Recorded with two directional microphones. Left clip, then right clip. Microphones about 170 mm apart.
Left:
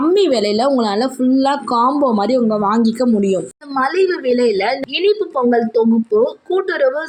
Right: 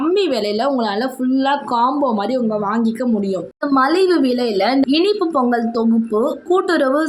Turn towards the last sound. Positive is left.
turn(degrees=10)  # may be behind; listen again after turning